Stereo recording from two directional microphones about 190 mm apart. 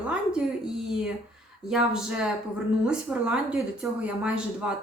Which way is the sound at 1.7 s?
5° right (ahead or behind).